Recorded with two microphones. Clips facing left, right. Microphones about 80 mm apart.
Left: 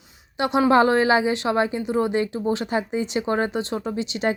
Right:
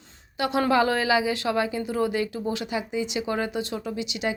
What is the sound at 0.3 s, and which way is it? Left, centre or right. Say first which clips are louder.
A woman's voice: left 4 dB; left.